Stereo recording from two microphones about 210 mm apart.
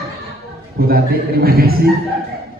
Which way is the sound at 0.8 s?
45° right (ahead or behind).